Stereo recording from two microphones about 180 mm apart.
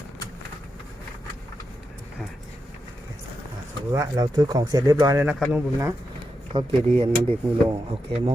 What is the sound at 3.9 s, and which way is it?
Speech, 20° right (ahead or behind).